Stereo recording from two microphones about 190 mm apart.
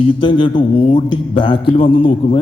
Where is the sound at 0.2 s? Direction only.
25° left (ahead or behind).